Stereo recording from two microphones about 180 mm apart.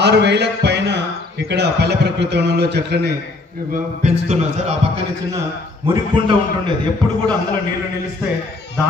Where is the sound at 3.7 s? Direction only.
40° right (ahead or behind).